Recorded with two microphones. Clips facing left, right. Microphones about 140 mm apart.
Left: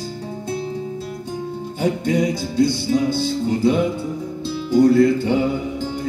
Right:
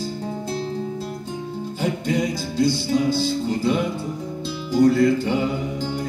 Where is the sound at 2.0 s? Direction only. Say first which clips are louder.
Left 3 dB; 60° left (ahead or behind).